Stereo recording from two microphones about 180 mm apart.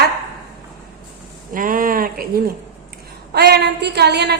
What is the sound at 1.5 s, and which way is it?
Speech, 50° right (ahead or behind).